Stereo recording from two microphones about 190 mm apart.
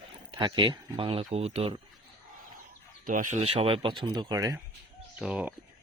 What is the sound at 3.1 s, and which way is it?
Speech, 45° right (ahead or behind).